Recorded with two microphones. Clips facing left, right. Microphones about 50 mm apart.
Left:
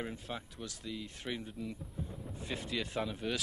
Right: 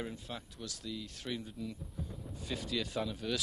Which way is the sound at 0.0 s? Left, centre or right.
Centre.